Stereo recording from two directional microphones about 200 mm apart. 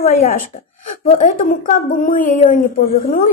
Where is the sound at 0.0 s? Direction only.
35° left (ahead or behind).